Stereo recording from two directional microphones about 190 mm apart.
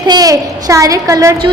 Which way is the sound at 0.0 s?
20° right (ahead or behind).